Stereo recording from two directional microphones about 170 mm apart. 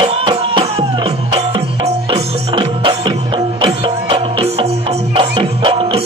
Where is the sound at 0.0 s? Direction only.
30° right (ahead or behind).